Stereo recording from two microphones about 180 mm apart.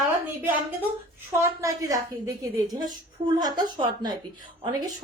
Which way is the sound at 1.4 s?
15° right (ahead or behind).